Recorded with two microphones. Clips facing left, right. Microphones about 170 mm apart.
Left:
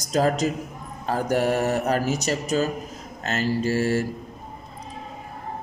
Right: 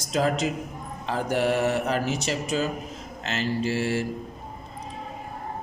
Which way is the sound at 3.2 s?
40° left (ahead or behind).